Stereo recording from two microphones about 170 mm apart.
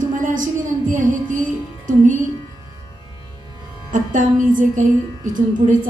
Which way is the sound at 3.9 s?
50° right (ahead or behind).